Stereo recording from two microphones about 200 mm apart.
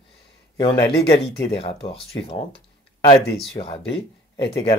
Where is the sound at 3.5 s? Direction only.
30° left (ahead or behind).